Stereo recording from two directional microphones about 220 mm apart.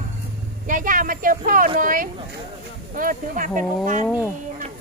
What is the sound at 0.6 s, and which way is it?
Speech, 35° right (ahead or behind).